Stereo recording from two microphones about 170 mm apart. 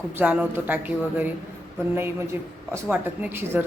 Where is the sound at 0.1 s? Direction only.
10° right (ahead or behind).